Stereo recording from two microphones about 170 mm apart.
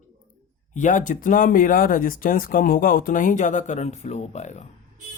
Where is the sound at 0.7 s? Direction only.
50° left (ahead or behind).